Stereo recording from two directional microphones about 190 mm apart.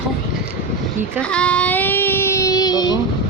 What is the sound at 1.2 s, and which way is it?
Child singing, 5° left (ahead or behind).